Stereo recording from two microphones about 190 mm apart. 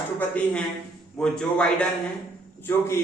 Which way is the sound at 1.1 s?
5° left (ahead or behind).